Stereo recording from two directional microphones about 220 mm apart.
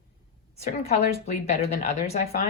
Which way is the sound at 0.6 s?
30° left (ahead or behind).